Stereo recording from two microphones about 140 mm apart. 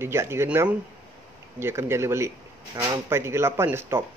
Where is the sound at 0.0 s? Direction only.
20° right (ahead or behind).